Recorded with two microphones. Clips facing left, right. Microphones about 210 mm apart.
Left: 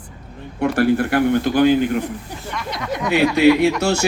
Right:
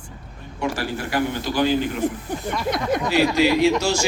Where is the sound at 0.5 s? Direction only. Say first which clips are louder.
Left 9 dB; 60° left (ahead or behind).